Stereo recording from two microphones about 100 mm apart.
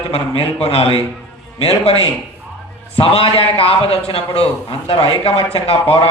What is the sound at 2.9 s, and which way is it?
A man's voice, 70° left (ahead or behind).